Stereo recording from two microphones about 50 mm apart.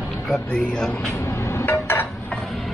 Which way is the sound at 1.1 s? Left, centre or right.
Left.